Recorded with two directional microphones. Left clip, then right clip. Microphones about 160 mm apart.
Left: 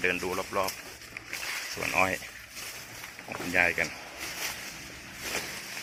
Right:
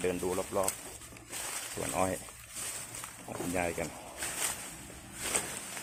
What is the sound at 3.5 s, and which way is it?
Speech, 10° right (ahead or behind).